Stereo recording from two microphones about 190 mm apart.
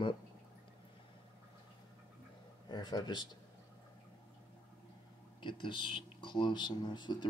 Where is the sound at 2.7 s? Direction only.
20° left (ahead or behind).